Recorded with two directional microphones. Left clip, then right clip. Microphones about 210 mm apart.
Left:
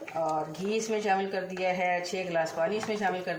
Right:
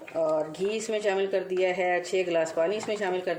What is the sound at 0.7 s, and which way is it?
Speech, 50° right (ahead or behind).